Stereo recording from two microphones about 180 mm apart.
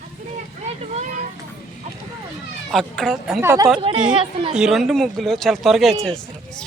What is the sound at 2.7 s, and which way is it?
Speech, centre (ahead or behind).